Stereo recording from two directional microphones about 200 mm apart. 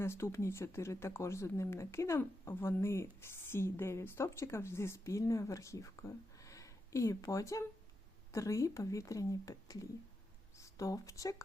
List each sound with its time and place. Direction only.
0.0 s speech: 15° left (ahead or behind)